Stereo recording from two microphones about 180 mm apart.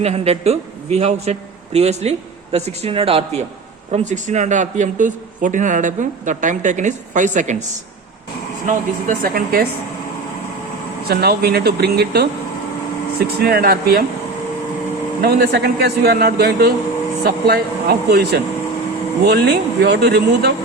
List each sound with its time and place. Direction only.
0.0 s a man's voice: 35° right (ahead or behind)
8.6 s a man's voice: 50° right (ahead or behind)
11.1 s a man's voice: 60° right (ahead or behind)
15.2 s a man's voice: 55° right (ahead or behind)